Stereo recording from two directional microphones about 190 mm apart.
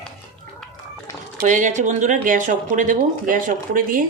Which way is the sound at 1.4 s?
40° right (ahead or behind).